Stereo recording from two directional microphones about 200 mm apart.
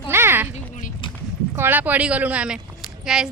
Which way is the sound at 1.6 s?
10° right (ahead or behind).